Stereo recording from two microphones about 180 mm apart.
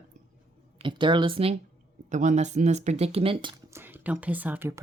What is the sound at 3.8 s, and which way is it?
Speech, 10° right (ahead or behind).